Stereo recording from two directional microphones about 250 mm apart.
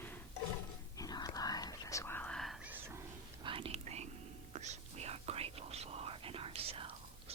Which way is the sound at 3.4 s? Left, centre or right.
Right.